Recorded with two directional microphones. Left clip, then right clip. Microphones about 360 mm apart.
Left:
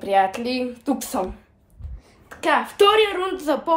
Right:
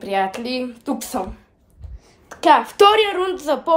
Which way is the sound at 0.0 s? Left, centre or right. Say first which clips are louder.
Left 2 dB; centre.